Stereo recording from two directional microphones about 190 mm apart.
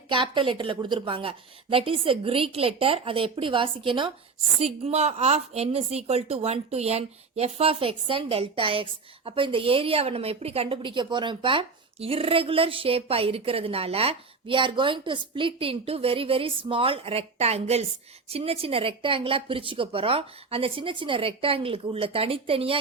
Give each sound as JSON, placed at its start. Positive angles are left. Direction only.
{"t": 0.1, "sound": "a woman's voice", "side_deg": -25}